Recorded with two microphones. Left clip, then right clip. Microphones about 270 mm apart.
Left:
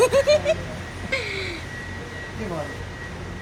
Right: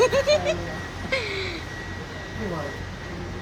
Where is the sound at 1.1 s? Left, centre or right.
Centre.